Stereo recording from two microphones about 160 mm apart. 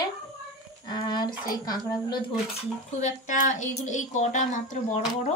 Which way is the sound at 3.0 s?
50° left (ahead or behind).